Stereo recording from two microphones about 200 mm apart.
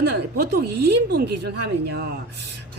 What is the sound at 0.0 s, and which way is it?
A woman's voice, 55° right (ahead or behind).